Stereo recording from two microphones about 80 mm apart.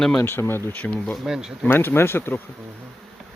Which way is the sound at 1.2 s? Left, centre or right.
Centre.